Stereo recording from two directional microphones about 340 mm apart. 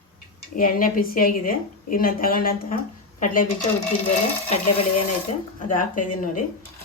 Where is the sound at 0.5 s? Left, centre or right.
Left.